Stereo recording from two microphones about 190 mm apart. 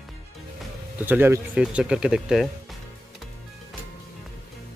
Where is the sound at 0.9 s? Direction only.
10° right (ahead or behind).